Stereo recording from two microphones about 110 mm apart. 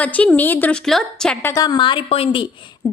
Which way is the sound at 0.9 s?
5° left (ahead or behind).